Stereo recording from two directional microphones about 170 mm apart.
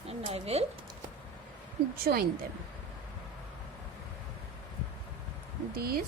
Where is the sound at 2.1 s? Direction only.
60° right (ahead or behind).